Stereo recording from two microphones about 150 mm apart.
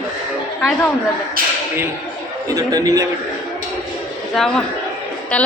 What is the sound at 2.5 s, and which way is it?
Speech, 25° right (ahead or behind).